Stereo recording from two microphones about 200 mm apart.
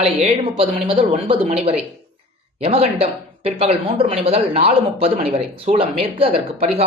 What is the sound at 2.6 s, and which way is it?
A man's voice, 30° right (ahead or behind).